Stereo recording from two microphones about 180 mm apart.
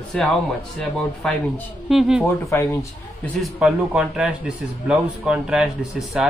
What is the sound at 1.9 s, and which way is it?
Speech, centre (ahead or behind).